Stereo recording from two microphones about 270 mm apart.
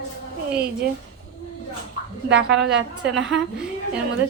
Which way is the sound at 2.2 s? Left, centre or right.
Right.